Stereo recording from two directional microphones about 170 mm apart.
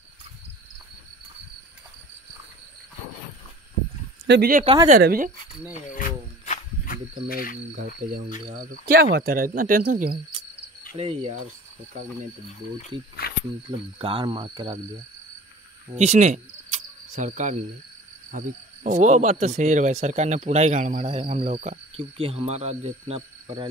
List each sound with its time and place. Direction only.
4.3 s speech: 65° right (ahead or behind)
5.9 s cricket: 50° left (ahead or behind)
7.7 s speech: 60° right (ahead or behind)
11.0 s cricket: 35° right (ahead or behind)
13.2 s cricket: 65° left (ahead or behind)
13.7 s cricket: 35° right (ahead or behind)
16.0 s speech: 40° right (ahead or behind)
21.4 s cricket: 50° right (ahead or behind)